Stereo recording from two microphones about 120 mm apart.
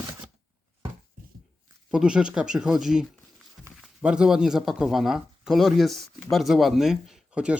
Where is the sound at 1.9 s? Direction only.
5° right (ahead or behind).